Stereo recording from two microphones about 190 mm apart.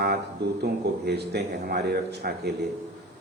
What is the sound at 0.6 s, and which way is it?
Speech, 60° right (ahead or behind).